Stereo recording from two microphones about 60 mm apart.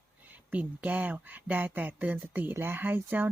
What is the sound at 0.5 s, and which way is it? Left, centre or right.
Speech, right.